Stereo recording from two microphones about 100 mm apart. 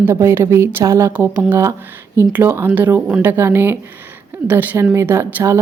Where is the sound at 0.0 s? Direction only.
25° right (ahead or behind).